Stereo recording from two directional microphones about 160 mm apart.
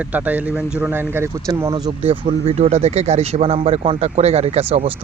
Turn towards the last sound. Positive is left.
turn(degrees=-40)  # may be behind; listen again after turning